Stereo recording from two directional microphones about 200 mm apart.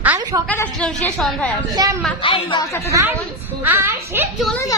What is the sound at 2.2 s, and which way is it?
Speech, 25° left (ahead or behind).